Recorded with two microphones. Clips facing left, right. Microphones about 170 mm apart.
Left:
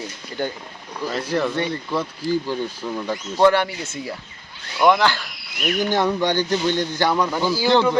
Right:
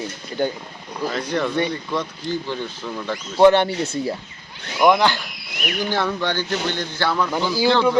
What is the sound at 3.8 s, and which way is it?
Speech, 35° right (ahead or behind).